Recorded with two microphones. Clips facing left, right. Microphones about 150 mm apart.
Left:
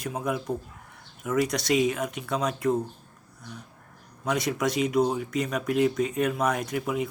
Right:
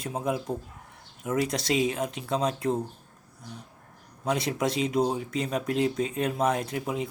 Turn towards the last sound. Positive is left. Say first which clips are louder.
# even
turn(degrees=-30)  # may be behind; listen again after turning